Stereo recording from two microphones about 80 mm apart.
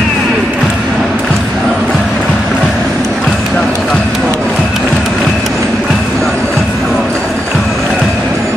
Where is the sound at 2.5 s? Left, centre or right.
Centre.